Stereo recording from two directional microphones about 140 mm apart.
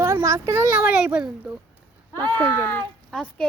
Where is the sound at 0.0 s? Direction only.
20° right (ahead or behind).